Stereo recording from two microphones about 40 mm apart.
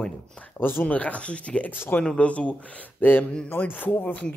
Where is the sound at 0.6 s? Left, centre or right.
Left.